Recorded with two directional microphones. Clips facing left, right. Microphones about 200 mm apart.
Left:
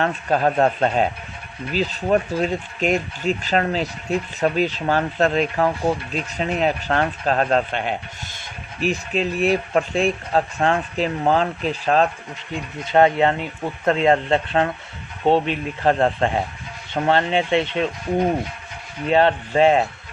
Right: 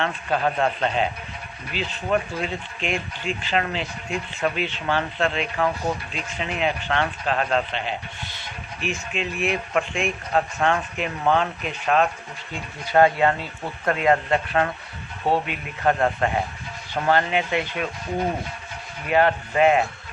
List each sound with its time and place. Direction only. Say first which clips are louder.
0.0 s speech: left 4 dB; 40° left (ahead or behind)
8.8 s speech: left 6 dB; 35° left (ahead or behind)
12.5 s speech: left 4 dB; 20° left (ahead or behind)
19.0 s speech: left 3 dB; 25° left (ahead or behind)